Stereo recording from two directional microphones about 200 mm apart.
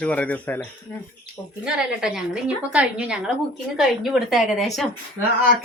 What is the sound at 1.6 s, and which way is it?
Speech, 5° right (ahead or behind).